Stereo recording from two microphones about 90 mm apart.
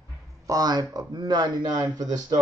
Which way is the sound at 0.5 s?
45° right (ahead or behind).